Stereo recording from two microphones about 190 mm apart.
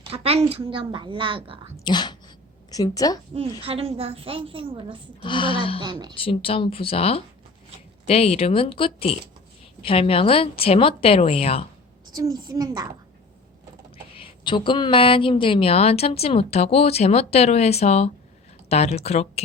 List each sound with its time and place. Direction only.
0.0 s speech: 30° right (ahead or behind)
1.7 s a woman's voice: 25° left (ahead or behind)
3.3 s speech: 30° right (ahead or behind)
5.2 s a woman's voice: 25° left (ahead or behind)
5.8 s speech: 20° right (ahead or behind)
6.1 s a woman's voice: 30° left (ahead or behind)
12.1 s speech: 20° right (ahead or behind)
14.2 s a woman's voice: 25° left (ahead or behind)